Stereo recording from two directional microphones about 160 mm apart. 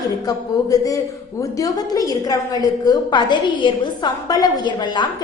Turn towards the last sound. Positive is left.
turn(degrees=25)  # may be behind; listen again after turning